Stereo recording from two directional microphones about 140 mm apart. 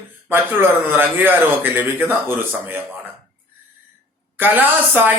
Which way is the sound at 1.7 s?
15° right (ahead or behind).